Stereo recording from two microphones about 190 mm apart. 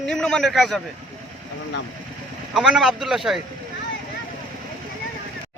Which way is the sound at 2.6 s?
Centre (ahead or behind).